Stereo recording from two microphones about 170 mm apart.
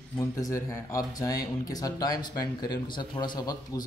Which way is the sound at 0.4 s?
20° left (ahead or behind).